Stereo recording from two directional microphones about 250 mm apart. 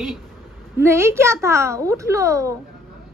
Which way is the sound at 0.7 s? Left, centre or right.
Centre.